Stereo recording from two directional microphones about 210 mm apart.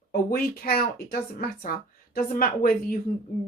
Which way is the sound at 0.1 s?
45° left (ahead or behind).